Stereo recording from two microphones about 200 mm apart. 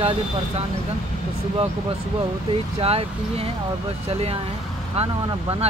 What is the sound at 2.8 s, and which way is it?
Speech, 30° right (ahead or behind).